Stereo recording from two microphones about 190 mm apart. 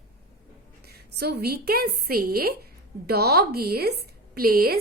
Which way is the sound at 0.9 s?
55° right (ahead or behind).